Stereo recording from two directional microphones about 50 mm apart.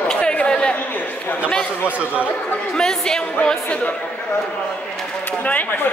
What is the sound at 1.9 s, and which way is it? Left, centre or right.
Speech, right.